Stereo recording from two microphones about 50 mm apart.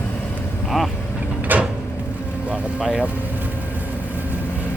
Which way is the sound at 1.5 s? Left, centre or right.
Right.